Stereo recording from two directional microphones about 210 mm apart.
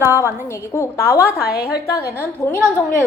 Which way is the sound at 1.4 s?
45° left (ahead or behind).